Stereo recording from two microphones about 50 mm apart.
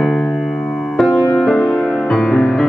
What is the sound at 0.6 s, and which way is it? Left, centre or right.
Music, centre.